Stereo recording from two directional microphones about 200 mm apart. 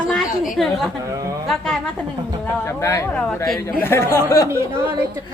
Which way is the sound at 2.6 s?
15° left (ahead or behind).